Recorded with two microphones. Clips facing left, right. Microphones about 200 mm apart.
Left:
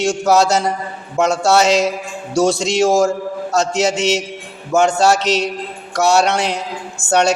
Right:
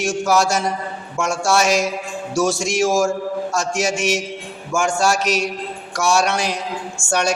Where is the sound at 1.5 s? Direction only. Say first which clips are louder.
Left 3 dB; 65° left (ahead or behind).